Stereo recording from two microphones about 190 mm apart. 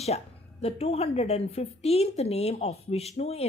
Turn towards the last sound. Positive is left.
turn(degrees=35)  # may be behind; listen again after turning